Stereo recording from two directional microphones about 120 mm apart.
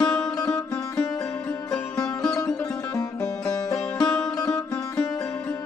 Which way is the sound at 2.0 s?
30° left (ahead or behind).